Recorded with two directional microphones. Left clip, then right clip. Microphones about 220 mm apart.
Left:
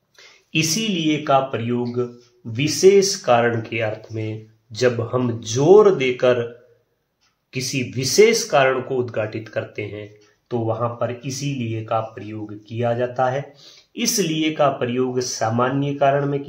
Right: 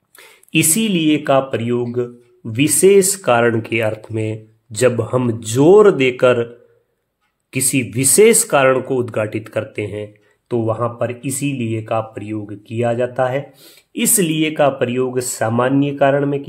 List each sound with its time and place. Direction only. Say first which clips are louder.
0.1 s speech: right 5 dB; 55° right (ahead or behind)
7.5 s speech: right 6 dB; 50° right (ahead or behind)